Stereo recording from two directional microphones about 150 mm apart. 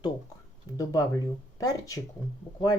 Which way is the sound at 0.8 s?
25° left (ahead or behind).